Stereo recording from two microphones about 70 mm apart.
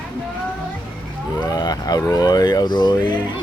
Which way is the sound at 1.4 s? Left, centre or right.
Left.